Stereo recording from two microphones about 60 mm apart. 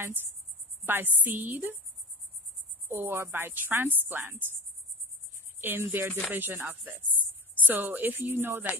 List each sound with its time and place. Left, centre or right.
0.0 s speech: right
2.9 s speech: right
5.6 s a woman's voice: right